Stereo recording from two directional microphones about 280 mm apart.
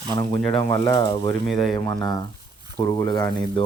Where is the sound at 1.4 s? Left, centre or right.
Centre.